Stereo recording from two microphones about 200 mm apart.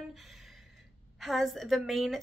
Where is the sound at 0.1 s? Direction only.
Centre (ahead or behind).